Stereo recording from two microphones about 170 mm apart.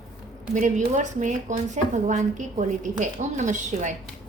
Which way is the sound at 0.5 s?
45° right (ahead or behind).